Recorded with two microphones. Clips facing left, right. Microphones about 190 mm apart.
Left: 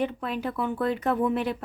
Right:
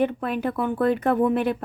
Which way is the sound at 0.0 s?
55° right (ahead or behind).